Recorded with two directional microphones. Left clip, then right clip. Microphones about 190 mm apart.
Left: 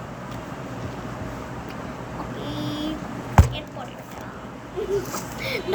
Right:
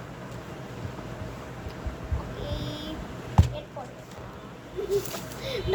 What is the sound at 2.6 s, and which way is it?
Vehicle, 15° left (ahead or behind).